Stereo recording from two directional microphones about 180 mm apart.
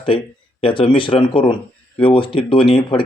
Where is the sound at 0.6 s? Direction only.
30° left (ahead or behind).